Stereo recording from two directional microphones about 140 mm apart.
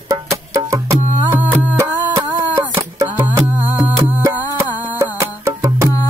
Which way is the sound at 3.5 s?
15° right (ahead or behind).